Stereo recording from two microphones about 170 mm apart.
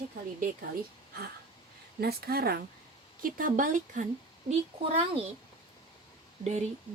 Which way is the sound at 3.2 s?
55° right (ahead or behind).